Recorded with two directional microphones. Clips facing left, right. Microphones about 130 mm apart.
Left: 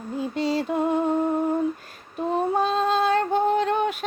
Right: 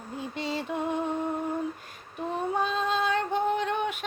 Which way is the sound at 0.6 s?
40° left (ahead or behind).